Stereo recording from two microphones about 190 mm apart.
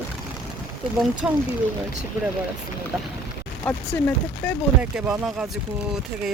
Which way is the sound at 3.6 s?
10° left (ahead or behind).